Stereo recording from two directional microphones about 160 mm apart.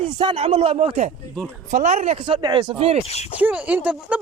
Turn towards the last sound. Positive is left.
turn(degrees=-10)  # may be behind; listen again after turning